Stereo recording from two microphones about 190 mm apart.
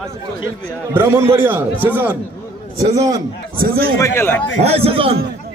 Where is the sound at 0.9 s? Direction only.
15° right (ahead or behind).